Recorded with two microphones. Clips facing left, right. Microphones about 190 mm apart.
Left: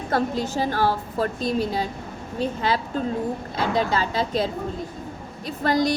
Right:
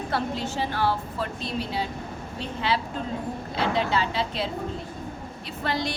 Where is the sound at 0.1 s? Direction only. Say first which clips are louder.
Left 7 dB; 40° left (ahead or behind).